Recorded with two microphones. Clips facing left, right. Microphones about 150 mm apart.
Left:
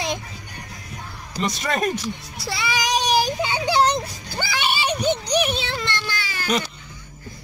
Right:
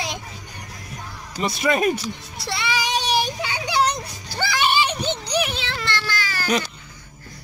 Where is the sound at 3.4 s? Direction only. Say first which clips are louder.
Left 3 dB; 25° left (ahead or behind).